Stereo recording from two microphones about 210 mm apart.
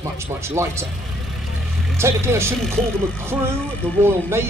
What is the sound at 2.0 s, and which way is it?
Speech, 10° right (ahead or behind).